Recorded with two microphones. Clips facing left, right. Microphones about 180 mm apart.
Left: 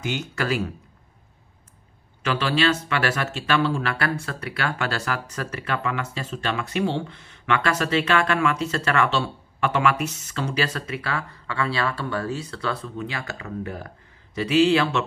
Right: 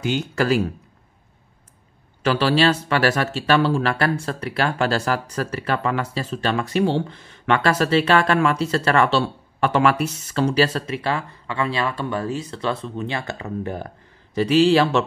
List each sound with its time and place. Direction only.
0.0 s speech: 35° right (ahead or behind)
2.2 s speech: 35° right (ahead or behind)